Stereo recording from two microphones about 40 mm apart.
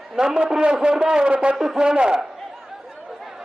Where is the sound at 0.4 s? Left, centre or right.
Centre.